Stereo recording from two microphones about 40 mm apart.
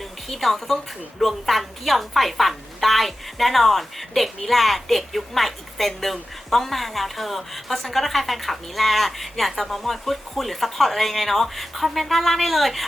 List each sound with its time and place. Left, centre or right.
0.0 s a woman's voice: centre